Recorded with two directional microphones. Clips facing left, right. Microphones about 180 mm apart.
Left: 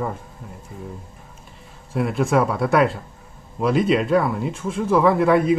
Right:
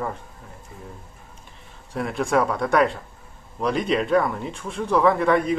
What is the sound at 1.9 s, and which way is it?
Speech, 5° left (ahead or behind).